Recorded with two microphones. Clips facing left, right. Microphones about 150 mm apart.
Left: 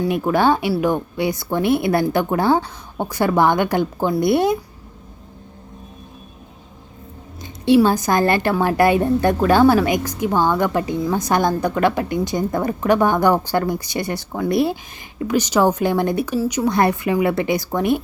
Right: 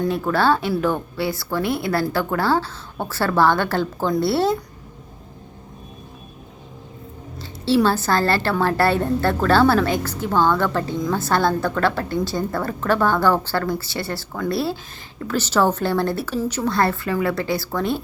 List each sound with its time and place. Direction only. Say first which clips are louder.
0.0 s a woman's voice: left 2 dB; 15° left (ahead or behind)
7.4 s a woman's voice: left 4 dB; 15° left (ahead or behind)